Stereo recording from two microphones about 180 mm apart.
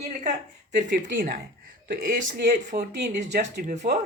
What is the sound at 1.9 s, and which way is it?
Speech, 55° right (ahead or behind).